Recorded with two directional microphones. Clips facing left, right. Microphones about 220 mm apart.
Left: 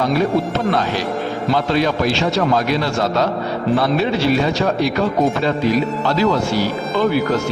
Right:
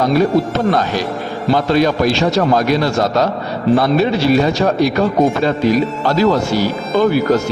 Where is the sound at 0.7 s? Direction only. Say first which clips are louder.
Right 2 dB; 45° right (ahead or behind).